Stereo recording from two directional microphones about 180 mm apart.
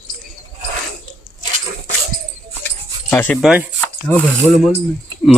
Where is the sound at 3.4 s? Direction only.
5° right (ahead or behind).